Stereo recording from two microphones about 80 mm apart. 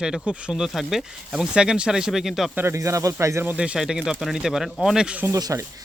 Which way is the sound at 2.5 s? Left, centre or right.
Right.